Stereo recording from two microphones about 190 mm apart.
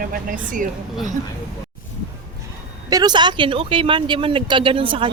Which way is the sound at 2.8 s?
20° right (ahead or behind).